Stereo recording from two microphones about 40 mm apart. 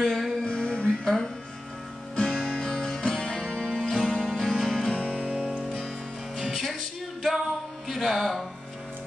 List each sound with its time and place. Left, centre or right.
0.0 s music: centre
0.5 s music: left
1.0 s music: centre
2.1 s music: left
4.8 s music: left
6.3 s music: centre